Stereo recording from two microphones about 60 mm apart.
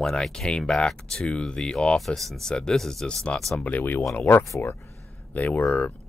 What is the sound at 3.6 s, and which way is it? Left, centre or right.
Speech, left.